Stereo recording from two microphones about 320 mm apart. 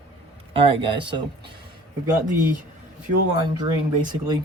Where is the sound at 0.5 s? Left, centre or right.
Centre.